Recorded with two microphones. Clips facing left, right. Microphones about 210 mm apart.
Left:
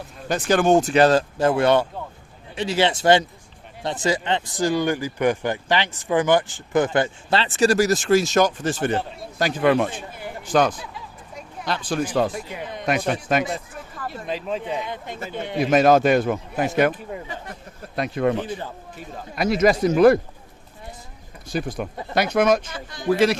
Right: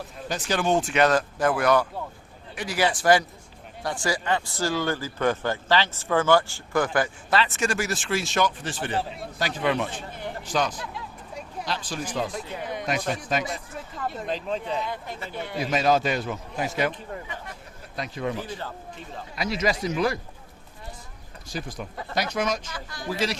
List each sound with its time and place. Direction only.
0.3 s speech: 50° left (ahead or behind)
10.2 s a sound: 5° left (ahead or behind)
10.5 s a man's voice: 55° left (ahead or behind)
12.3 s speech: 10° left (ahead or behind)
12.8 s a man's voice: 60° left (ahead or behind)
14.1 s speech: 5° left (ahead or behind); by 15.5 s 20° left (ahead or behind)
15.7 s a man's voice: 55° left (ahead or behind)
18.4 s speech: 15° left (ahead or behind)
19.4 s speech: 55° left (ahead or behind)
21.5 s a man's voice: 60° left (ahead or behind)
22.7 s speech: 20° left (ahead or behind)
23.0 s a man's voice: 60° left (ahead or behind)